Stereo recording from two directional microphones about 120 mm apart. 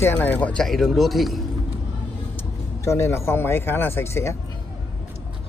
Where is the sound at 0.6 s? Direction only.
Centre (ahead or behind).